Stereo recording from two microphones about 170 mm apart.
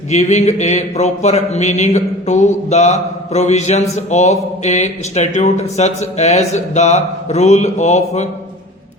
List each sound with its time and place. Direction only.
0.1 s speech: 40° left (ahead or behind)